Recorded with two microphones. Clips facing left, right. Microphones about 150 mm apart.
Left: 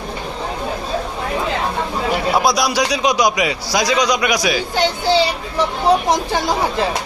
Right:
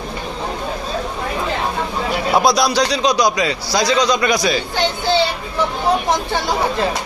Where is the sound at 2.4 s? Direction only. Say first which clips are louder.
Right 2 dB; 10° left (ahead or behind).